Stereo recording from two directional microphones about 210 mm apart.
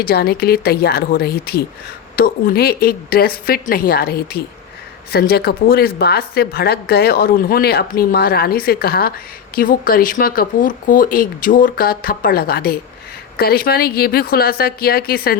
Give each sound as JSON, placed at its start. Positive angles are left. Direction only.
{"t": 0.0, "sound": "a woman's voice", "side_deg": 45}